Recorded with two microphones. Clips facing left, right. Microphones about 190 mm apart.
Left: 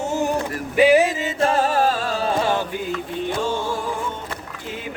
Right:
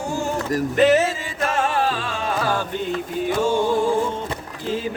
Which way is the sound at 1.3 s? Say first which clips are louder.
Left 3 dB; 35° left (ahead or behind).